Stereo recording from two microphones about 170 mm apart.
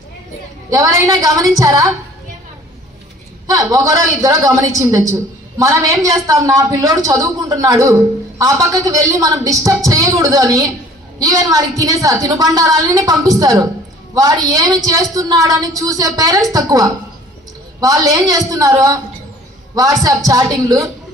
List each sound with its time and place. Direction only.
0.7 s a woman's voice: 20° right (ahead or behind)
3.5 s a woman's voice: 20° right (ahead or behind)